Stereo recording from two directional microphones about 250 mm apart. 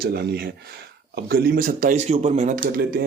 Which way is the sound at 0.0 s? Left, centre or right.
Right.